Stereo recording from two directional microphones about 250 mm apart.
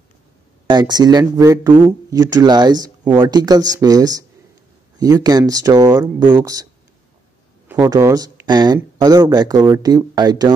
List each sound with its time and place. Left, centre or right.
0.7 s speech: centre